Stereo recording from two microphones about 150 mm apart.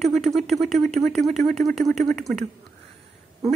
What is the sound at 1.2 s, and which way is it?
Speech, 50° right (ahead or behind).